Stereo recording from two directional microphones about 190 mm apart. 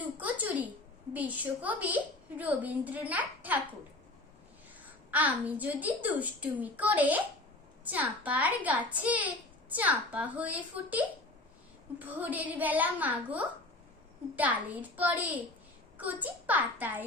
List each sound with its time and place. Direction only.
0.2 s a sound: 10° right (ahead or behind)
1.1 s a child's voice: 10° right (ahead or behind)
5.1 s a child's voice: 10° right (ahead or behind)